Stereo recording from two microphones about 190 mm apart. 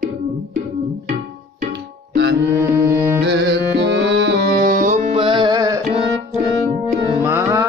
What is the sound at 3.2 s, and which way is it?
Music, 60° right (ahead or behind).